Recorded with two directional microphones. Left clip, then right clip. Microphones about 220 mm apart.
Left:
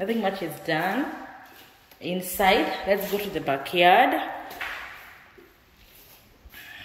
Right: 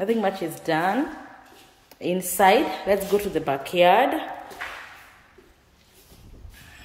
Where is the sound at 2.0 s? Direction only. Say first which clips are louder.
Right 4 dB; 15° right (ahead or behind).